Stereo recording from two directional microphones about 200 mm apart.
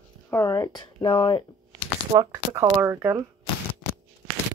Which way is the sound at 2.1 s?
20° right (ahead or behind).